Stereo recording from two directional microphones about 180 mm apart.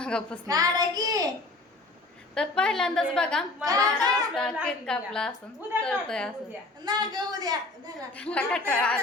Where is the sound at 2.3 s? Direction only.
5° left (ahead or behind).